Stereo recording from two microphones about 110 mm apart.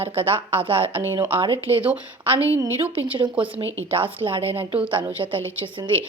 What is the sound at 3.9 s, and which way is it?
Speech, 55° right (ahead or behind).